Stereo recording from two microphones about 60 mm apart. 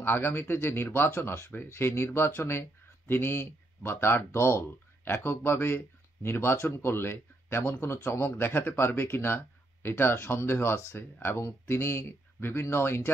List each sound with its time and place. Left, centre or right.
0.0 s speech: left